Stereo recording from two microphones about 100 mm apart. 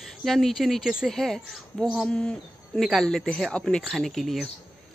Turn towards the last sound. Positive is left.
turn(degrees=0)  # may be behind; listen again after turning